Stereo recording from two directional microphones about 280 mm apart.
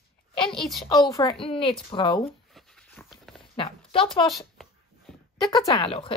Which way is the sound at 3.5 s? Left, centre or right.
Centre.